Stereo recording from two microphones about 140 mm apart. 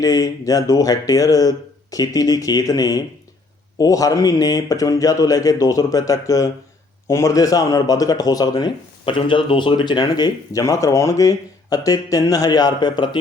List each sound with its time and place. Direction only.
0.0 s a man's voice: 25° left (ahead or behind)